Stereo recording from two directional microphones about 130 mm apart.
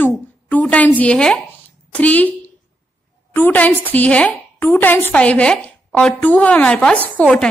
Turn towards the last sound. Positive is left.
turn(degrees=5)  # may be behind; listen again after turning